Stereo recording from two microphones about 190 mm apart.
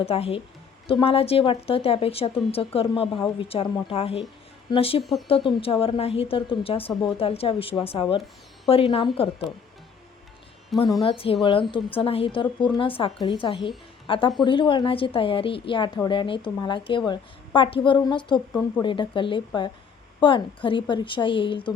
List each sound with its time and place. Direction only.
0.0 s a woman's voice: 30° left (ahead or behind)
11.0 s a woman's voice: 30° left (ahead or behind)